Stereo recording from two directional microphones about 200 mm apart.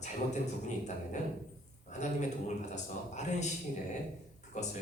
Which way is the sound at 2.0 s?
35° left (ahead or behind).